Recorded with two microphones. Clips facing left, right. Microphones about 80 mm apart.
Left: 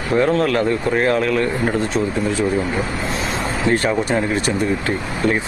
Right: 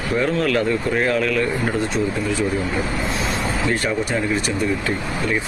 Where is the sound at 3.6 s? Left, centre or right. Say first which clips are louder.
Left 6 dB; left.